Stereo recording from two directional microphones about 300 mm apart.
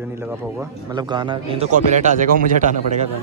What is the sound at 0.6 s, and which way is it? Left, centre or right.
Speech, centre.